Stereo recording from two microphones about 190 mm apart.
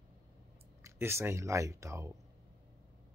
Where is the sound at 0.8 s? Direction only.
15° right (ahead or behind).